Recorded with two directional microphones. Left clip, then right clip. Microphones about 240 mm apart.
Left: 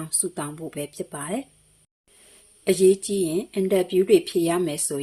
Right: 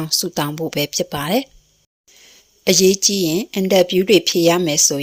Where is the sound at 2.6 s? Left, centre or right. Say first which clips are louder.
Right 5 dB; right.